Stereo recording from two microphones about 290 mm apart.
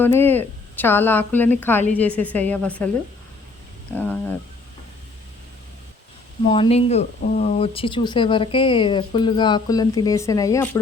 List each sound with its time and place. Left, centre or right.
0.0 s a woman's voice: centre
6.5 s speech: centre